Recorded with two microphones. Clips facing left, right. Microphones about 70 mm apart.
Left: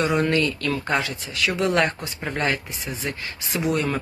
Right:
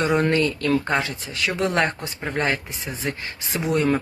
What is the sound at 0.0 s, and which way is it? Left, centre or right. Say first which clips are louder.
Speech: right 1 dB; right.